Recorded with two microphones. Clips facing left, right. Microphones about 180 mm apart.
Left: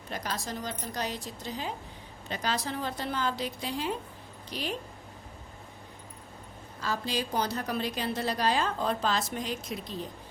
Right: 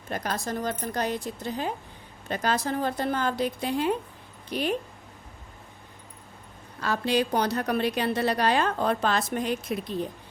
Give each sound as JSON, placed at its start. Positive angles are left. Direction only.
{"t": 0.1, "sound": "speech", "side_deg": -55}
{"t": 6.7, "sound": "a woman's voice", "side_deg": -65}